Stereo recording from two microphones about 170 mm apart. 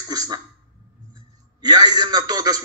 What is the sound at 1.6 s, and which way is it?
Speech, 25° right (ahead or behind).